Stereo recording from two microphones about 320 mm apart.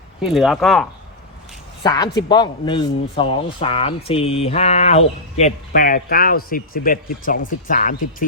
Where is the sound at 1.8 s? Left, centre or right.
Centre.